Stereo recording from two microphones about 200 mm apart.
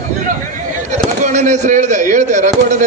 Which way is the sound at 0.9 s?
35° right (ahead or behind).